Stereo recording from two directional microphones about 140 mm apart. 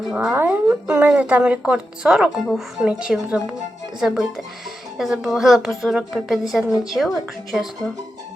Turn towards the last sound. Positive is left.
turn(degrees=0)  # may be behind; listen again after turning